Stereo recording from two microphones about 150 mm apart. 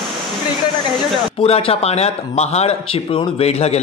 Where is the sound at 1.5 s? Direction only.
40° left (ahead or behind).